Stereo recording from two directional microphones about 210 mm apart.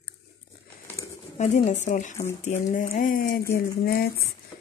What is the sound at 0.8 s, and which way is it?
Bird, 15° left (ahead or behind).